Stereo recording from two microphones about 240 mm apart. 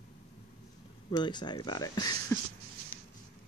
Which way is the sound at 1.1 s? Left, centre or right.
Centre.